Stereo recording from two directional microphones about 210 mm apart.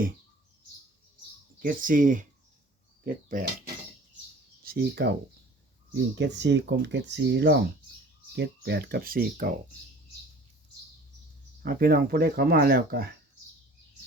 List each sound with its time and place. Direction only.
1.5 s speech: 40° right (ahead or behind)
4.6 s speech: 45° right (ahead or behind)
11.6 s speech: 45° right (ahead or behind)